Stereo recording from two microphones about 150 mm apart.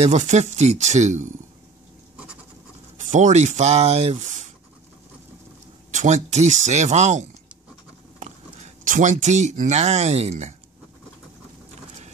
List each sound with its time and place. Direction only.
0.0 s speech: 50° right (ahead or behind)
3.0 s speech: 55° right (ahead or behind)
5.9 s speech: 50° right (ahead or behind)